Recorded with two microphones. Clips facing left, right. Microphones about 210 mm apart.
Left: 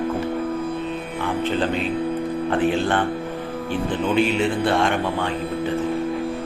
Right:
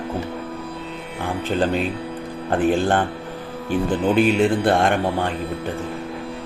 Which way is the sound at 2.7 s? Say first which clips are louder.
Right 2 dB; 45° right (ahead or behind).